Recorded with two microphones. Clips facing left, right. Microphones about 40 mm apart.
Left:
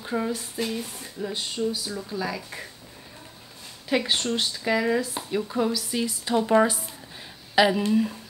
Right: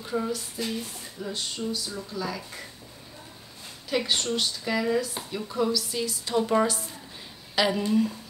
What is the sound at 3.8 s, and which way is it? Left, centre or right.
Speech, centre.